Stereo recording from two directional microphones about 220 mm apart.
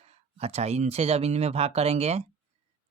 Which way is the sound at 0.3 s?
30° right (ahead or behind).